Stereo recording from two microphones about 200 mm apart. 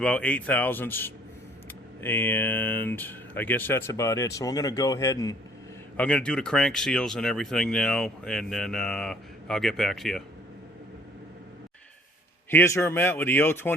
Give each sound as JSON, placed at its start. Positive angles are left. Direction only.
{"t": 0.0, "sound": "speech", "side_deg": 5}
{"t": 6.0, "sound": "speech", "side_deg": 5}
{"t": 12.5, "sound": "speech", "side_deg": 10}